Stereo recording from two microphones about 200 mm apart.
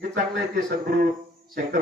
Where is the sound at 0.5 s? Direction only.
45° right (ahead or behind).